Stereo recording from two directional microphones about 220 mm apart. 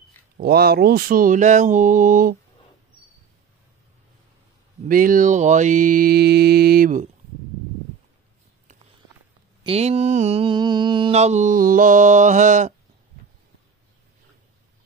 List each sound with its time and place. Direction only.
0.4 s mantra: 45° right (ahead or behind)
4.8 s mantra: 40° right (ahead or behind)
9.6 s mantra: 30° right (ahead or behind)